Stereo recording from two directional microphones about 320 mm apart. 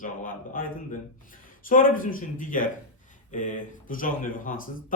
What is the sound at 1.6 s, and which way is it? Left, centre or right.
Speech, left.